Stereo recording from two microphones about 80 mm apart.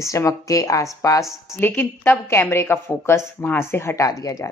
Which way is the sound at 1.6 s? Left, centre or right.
Left.